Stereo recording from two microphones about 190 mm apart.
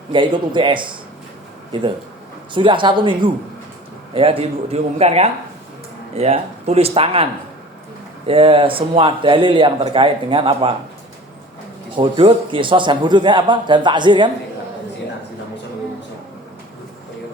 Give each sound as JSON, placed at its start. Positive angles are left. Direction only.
{"t": 0.1, "sound": "speech", "side_deg": -25}
{"t": 2.5, "sound": "a man's voice", "side_deg": -25}
{"t": 8.3, "sound": "speech", "side_deg": -30}
{"t": 11.9, "sound": "speech", "side_deg": -25}